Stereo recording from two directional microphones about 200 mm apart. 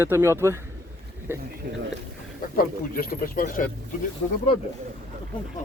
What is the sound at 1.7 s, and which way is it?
Speech, 40° right (ahead or behind).